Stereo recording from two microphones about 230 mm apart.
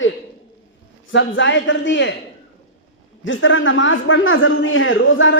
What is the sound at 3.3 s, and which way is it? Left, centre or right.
A man's voice, left.